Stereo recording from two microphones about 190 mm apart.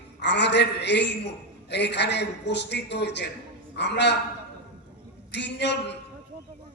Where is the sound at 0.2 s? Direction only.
65° left (ahead or behind).